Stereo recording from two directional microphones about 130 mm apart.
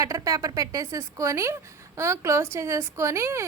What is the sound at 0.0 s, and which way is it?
A woman's voice, 25° right (ahead or behind).